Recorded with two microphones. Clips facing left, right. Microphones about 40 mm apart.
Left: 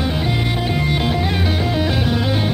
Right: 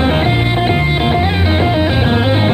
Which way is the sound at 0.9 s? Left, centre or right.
Right.